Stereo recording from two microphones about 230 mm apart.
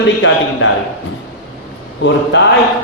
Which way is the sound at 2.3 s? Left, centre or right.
Left.